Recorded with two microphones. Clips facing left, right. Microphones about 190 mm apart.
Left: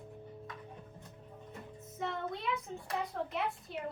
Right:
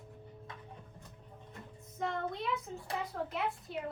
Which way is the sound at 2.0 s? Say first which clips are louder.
Right 1 dB; centre (ahead or behind).